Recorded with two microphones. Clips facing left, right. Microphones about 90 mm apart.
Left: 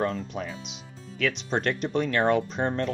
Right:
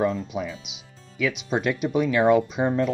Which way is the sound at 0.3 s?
5° right (ahead or behind).